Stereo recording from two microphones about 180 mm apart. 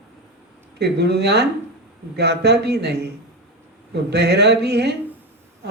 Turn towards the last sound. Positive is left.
turn(degrees=-65)  # may be behind; listen again after turning